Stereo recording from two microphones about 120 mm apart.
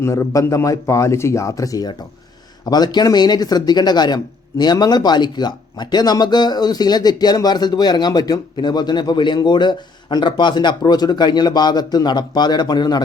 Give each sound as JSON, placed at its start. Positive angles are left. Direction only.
{"t": 0.0, "sound": "a man's voice", "side_deg": 25}